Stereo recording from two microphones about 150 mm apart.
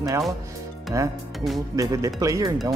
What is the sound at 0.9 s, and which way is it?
Speech, 20° right (ahead or behind).